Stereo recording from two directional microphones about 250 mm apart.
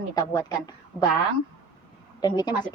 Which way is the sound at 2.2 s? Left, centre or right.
Centre.